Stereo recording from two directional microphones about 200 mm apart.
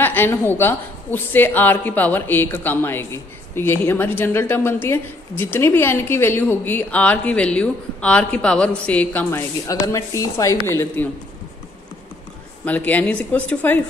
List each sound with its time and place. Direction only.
0.0 s a woman's voice: 10° left (ahead or behind)
12.6 s a woman's voice: 10° left (ahead or behind)